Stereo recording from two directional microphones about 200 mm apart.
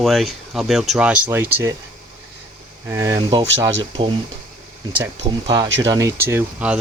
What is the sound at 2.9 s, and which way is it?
Speech, 15° right (ahead or behind).